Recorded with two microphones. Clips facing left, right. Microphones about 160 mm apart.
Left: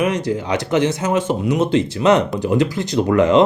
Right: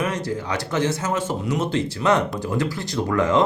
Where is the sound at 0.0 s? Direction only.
20° left (ahead or behind).